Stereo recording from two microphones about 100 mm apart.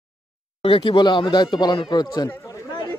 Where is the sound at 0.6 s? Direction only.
60° left (ahead or behind); by 2.2 s 45° left (ahead or behind).